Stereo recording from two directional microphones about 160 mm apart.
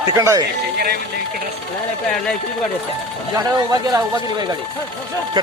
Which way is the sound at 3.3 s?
25° right (ahead or behind).